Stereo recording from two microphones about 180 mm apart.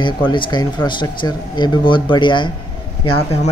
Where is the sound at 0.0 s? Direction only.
25° left (ahead or behind).